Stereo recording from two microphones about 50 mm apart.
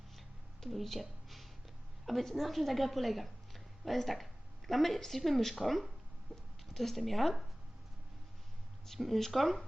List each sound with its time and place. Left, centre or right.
0.6 s a woman's voice: centre
8.9 s speech: centre